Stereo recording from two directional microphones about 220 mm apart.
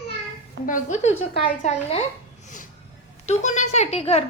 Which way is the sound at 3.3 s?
35° left (ahead or behind).